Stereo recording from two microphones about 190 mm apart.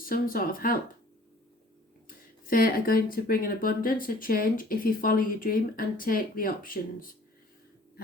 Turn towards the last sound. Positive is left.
turn(degrees=50)  # may be behind; listen again after turning